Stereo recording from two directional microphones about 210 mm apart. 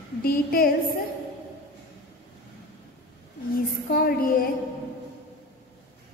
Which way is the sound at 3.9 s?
45° left (ahead or behind).